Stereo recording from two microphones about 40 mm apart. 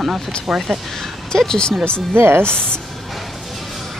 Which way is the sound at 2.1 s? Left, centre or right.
Right.